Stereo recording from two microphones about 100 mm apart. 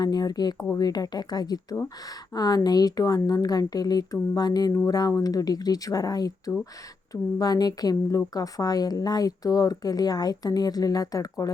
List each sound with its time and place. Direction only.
0.0 s speech: 40° left (ahead or behind)